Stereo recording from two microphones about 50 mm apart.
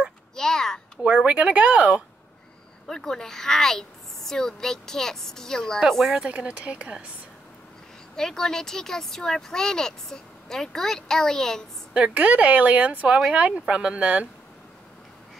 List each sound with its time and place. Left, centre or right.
0.4 s a sound: centre
1.0 s speech: right
2.9 s a woman's voice: centre
6.2 s speech: right
8.2 s speech: centre
11.9 s speech: right